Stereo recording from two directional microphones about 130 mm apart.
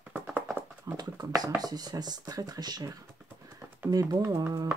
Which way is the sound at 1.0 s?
30° right (ahead or behind).